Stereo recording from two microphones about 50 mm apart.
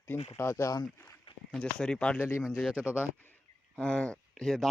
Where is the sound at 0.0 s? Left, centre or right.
Left.